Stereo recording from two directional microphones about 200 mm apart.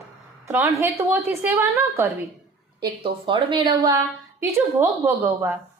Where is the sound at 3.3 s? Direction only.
25° right (ahead or behind).